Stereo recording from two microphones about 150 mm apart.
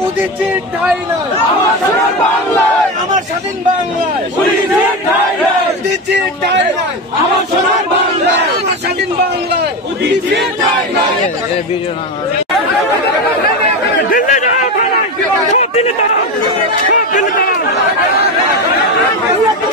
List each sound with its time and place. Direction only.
14.1 s chatter: 60° left (ahead or behind)
15.5 s speech: 45° left (ahead or behind)
16.9 s a sound: 60° left (ahead or behind)